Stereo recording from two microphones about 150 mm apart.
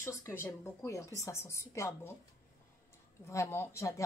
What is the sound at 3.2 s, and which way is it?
Speech, 20° left (ahead or behind).